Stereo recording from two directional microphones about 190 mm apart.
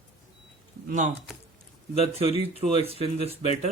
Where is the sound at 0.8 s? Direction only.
40° right (ahead or behind).